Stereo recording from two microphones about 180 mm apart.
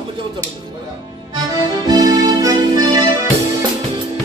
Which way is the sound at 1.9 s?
20° right (ahead or behind).